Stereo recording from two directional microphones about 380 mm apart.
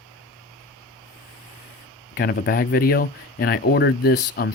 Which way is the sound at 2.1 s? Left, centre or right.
Left.